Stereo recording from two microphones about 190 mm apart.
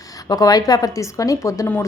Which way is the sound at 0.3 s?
20° left (ahead or behind).